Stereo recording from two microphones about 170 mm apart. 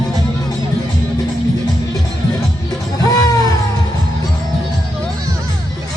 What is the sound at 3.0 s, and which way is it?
Music, 20° left (ahead or behind).